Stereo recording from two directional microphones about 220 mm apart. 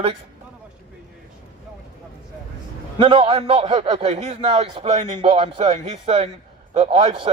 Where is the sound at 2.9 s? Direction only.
25° right (ahead or behind).